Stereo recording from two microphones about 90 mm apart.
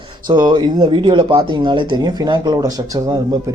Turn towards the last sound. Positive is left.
turn(degrees=-45)  # may be behind; listen again after turning